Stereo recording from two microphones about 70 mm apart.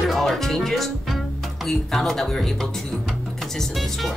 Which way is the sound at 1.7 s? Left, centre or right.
Centre.